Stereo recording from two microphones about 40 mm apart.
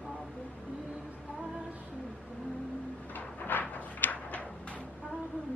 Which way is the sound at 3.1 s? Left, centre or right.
Left.